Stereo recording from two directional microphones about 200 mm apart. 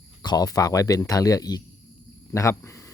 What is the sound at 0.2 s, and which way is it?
Speech, 20° left (ahead or behind).